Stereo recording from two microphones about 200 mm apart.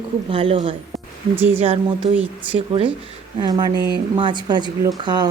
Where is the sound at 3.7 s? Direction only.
55° right (ahead or behind).